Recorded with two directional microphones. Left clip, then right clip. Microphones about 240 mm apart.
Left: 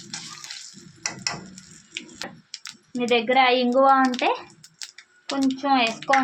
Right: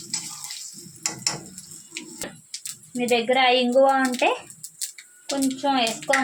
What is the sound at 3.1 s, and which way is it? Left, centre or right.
Speech, centre.